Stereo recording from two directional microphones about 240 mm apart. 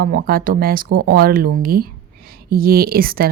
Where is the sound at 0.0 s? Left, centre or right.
Right.